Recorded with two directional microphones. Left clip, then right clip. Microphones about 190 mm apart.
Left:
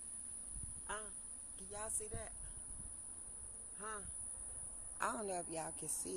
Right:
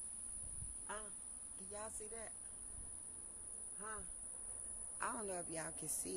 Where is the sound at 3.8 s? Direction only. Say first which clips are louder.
Left 3 dB; 35° left (ahead or behind).